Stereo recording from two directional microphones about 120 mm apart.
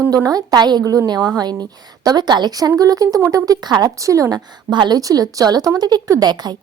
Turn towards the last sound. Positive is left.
turn(degrees=-35)  # may be behind; listen again after turning